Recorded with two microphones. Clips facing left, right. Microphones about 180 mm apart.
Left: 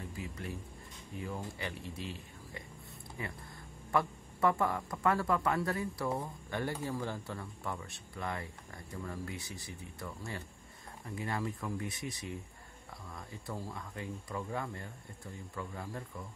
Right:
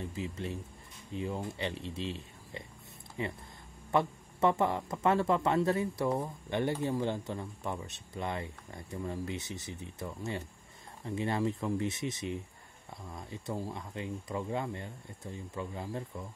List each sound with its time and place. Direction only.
0.0 s speech: 20° right (ahead or behind)